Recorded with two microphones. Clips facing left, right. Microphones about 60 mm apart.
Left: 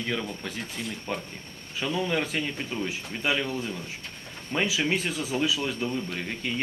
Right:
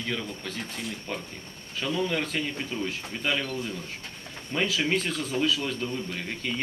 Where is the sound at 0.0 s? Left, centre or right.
Centre.